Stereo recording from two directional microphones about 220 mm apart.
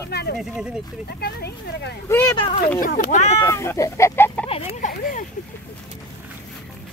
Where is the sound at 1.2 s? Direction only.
50° left (ahead or behind).